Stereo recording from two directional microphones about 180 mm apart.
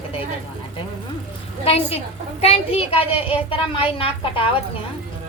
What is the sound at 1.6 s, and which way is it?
A woman's voice, 35° left (ahead or behind).